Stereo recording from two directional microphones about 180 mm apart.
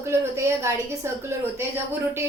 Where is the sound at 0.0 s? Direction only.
15° right (ahead or behind).